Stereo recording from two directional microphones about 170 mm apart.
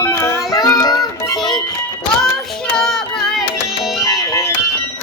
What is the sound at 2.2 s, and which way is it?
Music, centre (ahead or behind).